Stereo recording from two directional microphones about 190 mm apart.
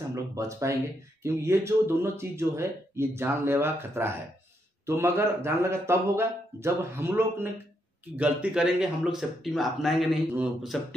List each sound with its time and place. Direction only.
0.1 s speech: 15° right (ahead or behind); by 11.0 s centre (ahead or behind)